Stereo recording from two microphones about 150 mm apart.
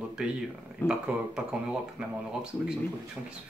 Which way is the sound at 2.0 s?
5° right (ahead or behind).